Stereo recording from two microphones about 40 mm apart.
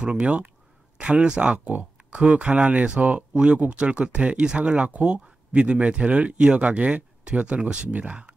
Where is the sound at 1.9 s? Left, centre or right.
Right.